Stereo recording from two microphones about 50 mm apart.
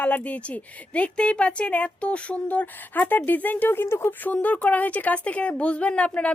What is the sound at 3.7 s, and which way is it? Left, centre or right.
Speech, left.